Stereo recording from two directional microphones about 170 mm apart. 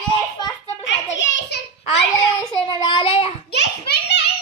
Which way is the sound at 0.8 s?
90° left.